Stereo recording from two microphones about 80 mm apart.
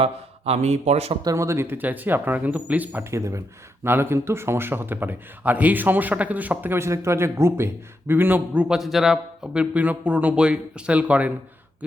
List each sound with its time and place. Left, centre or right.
1.2 s speech: right
1.6 s a man's voice: right
3.0 s a man's voice: right
8.6 s a man's voice: centre